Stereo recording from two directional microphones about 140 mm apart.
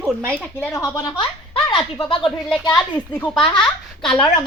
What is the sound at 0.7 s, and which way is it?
Speech, 25° left (ahead or behind).